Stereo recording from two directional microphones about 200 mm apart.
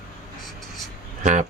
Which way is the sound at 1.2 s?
35° right (ahead or behind).